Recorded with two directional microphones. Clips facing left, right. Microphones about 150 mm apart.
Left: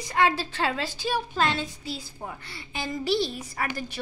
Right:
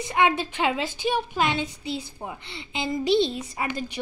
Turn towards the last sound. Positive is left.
turn(degrees=-20)  # may be behind; listen again after turning